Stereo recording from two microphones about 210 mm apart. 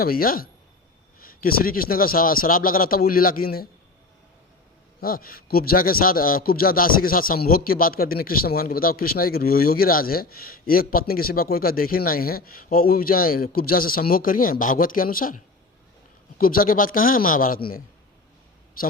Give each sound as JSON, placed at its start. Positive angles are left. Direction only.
{"t": 0.0, "sound": "a man's voice", "side_deg": 45}
{"t": 4.9, "sound": "a man's voice", "side_deg": 45}
{"t": 16.4, "sound": "a man's voice", "side_deg": 40}